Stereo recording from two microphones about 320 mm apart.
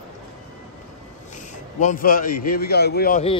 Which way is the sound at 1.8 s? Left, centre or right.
Left.